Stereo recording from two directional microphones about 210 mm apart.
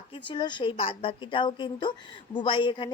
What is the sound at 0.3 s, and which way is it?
A woman's voice, 20° left (ahead or behind).